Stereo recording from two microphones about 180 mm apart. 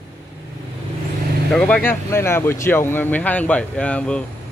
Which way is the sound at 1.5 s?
5° left (ahead or behind).